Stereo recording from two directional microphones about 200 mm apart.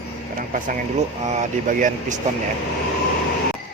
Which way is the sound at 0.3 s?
40° right (ahead or behind).